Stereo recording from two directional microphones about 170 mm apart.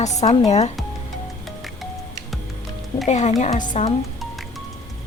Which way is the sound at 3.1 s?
45° left (ahead or behind).